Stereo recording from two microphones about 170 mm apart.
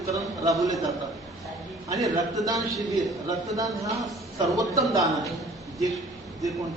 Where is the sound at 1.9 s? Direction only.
20° right (ahead or behind).